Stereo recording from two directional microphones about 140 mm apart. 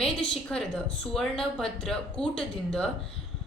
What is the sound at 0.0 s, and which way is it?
A woman's voice, 5° left (ahead or behind).